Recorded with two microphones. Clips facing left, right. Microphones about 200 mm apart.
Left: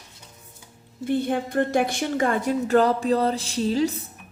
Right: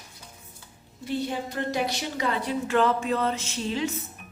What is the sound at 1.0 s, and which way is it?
A woman's voice, 55° left (ahead or behind).